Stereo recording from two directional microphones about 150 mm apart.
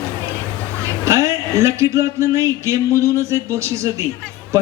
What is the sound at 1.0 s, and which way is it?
A man's voice, 20° right (ahead or behind).